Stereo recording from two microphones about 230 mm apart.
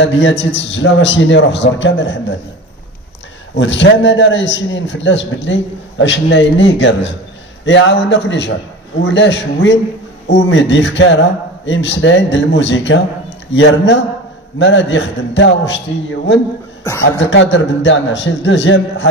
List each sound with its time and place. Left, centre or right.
0.0 s a man's voice: left
3.5 s a man's voice: left